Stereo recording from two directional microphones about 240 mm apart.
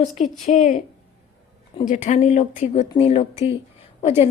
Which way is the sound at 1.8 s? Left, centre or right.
Left.